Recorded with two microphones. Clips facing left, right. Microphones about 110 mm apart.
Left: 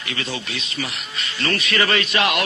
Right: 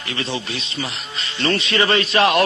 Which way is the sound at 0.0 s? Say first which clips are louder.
Right 3 dB; 30° right (ahead or behind).